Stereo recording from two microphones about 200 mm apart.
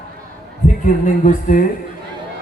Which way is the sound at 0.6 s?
35° left (ahead or behind).